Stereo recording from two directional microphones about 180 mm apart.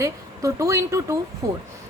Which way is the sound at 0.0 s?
15° right (ahead or behind).